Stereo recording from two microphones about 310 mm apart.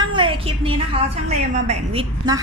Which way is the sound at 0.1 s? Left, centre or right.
Centre.